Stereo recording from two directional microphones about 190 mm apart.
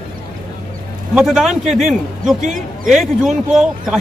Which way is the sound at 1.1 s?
Centre (ahead or behind).